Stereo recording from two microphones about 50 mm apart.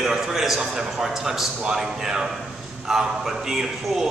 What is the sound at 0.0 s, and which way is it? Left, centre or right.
A man's voice, centre.